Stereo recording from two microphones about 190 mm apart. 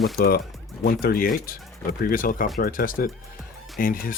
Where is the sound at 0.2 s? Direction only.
55° left (ahead or behind).